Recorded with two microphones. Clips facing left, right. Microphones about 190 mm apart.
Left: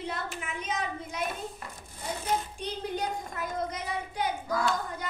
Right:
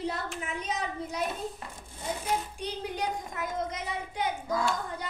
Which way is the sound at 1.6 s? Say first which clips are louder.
Even; 25° right (ahead or behind).